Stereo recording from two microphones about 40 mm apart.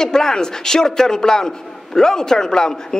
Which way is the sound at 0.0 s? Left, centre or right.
Centre.